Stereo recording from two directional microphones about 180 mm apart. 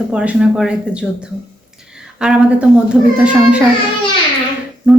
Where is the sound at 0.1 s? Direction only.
5° right (ahead or behind).